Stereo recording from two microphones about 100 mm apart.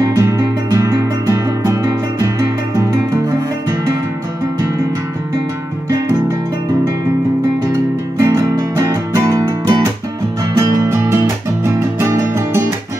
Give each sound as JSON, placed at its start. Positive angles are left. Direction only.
{"t": 0.0, "sound": "music", "side_deg": -35}
{"t": 8.2, "sound": "music", "side_deg": -35}
{"t": 10.9, "sound": "music", "side_deg": -25}